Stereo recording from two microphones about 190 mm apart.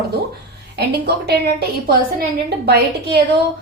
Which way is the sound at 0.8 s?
60° right (ahead or behind).